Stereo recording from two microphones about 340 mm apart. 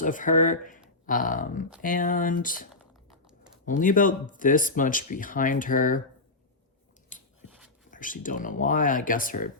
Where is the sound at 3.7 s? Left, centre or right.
Left.